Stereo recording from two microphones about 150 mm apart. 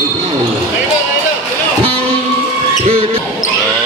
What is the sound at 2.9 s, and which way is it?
Speech, 35° right (ahead or behind).